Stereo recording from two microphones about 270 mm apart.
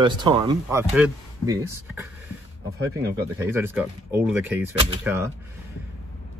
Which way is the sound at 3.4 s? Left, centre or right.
Centre.